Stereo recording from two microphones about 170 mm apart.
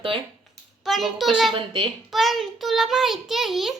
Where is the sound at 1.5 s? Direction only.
30° right (ahead or behind).